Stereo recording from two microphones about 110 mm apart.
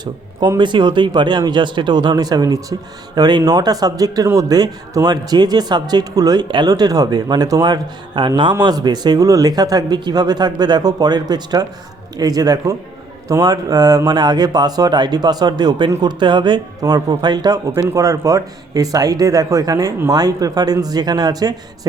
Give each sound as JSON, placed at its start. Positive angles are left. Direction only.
{"t": 0.0, "sound": "speech", "side_deg": -40}
{"t": 17.7, "sound": "speech", "side_deg": -20}
{"t": 18.0, "sound": "speech", "side_deg": -30}